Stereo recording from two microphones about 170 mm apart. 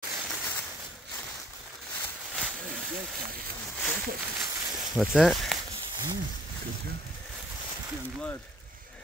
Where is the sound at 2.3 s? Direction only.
5° right (ahead or behind).